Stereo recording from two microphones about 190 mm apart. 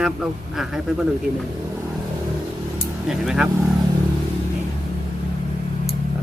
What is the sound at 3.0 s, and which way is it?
Speech, centre (ahead or behind).